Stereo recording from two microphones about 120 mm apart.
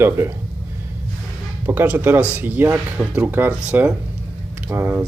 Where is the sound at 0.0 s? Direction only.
20° right (ahead or behind).